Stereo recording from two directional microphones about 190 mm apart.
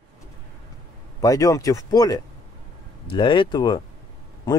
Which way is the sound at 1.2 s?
20° left (ahead or behind).